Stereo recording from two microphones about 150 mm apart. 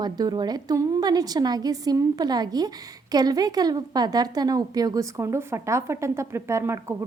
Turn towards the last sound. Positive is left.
turn(degrees=-20)  # may be behind; listen again after turning